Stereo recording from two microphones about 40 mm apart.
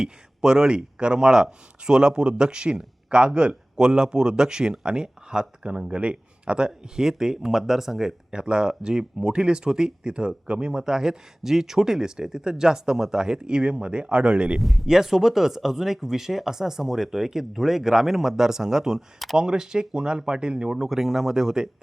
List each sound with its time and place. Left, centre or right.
0.0 s speech: centre
14.6 s speech: centre; by 20.8 s right
20.8 s speech: centre